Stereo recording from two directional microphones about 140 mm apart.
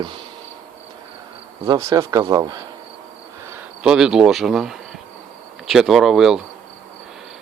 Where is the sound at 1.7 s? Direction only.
25° right (ahead or behind).